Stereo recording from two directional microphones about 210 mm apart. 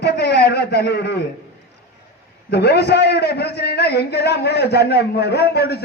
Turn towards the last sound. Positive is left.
turn(degrees=50)  # may be behind; listen again after turning